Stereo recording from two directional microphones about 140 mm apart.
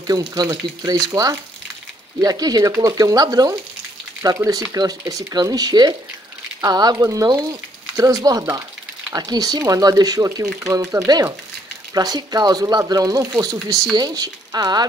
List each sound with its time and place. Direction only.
0.0 s speech: 25° right (ahead or behind)